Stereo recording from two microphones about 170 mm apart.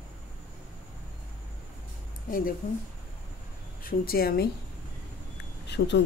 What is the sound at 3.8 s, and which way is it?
Speech, 60° left (ahead or behind).